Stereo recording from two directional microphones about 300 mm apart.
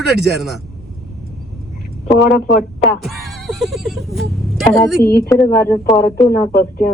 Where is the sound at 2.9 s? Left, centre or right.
Centre.